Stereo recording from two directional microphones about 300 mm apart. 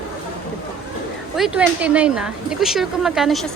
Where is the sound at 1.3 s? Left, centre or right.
Centre.